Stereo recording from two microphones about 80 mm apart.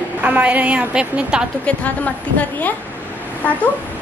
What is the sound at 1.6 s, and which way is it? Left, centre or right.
A woman's voice, centre.